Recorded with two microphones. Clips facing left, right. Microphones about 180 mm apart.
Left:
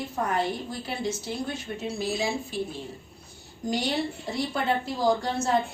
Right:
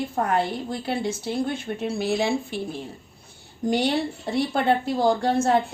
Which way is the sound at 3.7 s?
60° right (ahead or behind).